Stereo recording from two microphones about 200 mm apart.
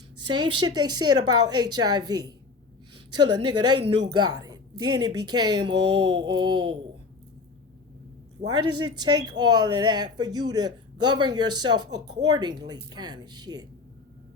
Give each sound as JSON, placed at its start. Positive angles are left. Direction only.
{"t": 0.3, "sound": "speech", "side_deg": -20}
{"t": 8.4, "sound": "a man's voice", "side_deg": -35}
{"t": 8.8, "sound": "speech", "side_deg": -20}